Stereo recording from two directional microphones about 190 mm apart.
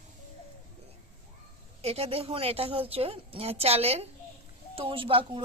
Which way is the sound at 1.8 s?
30° right (ahead or behind).